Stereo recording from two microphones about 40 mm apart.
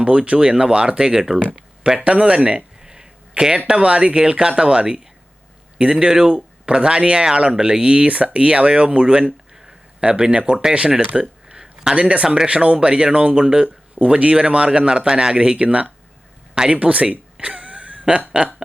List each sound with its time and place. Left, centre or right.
0.0 s a man's voice: right
2.0 s a man's voice: right
2.8 s a sound: centre
3.4 s a man's voice: right
11.2 s a sound: centre
11.9 s a man's voice: right
17.4 s wheeze: right
18.3 s a man's voice: right